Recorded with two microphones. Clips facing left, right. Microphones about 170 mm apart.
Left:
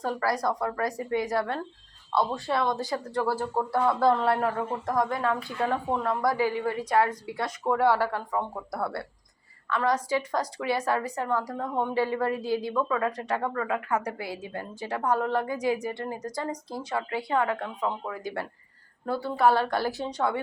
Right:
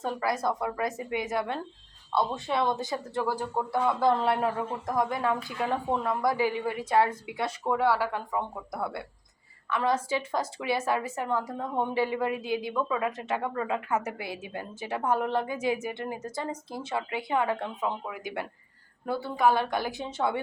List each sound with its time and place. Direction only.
0.0 s a woman's voice: 25° right (ahead or behind)
7.7 s a woman's voice: 10° right (ahead or behind)